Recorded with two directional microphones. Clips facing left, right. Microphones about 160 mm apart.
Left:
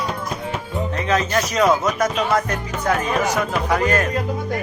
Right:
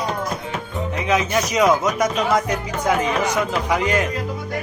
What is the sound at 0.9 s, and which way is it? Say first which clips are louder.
Speech: right 1 dB; 15° right (ahead or behind).